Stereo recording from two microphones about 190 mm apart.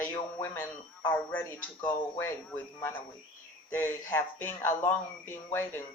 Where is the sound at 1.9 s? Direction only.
15° left (ahead or behind).